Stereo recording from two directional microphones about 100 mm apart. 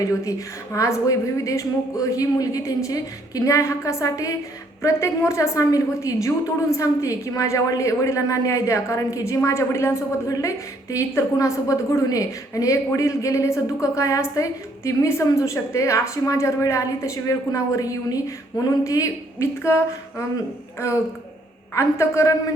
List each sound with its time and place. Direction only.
0.0 s a woman's voice: 35° left (ahead or behind)
20.7 s a woman's voice: 25° left (ahead or behind)